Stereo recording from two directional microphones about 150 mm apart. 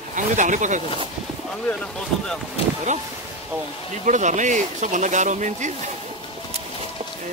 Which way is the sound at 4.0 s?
55° right (ahead or behind).